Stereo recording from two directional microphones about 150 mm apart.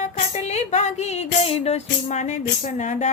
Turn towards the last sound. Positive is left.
turn(degrees=55)  # may be behind; listen again after turning